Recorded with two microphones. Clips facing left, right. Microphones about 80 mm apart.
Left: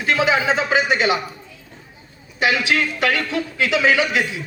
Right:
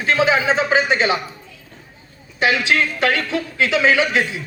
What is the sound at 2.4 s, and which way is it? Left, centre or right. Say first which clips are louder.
A man's voice: right 1 dB; right.